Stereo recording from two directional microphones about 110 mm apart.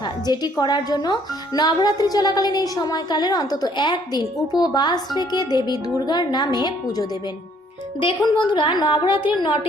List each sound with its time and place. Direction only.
0.0 s speech: 40° left (ahead or behind)
8.0 s a woman's voice: 50° left (ahead or behind)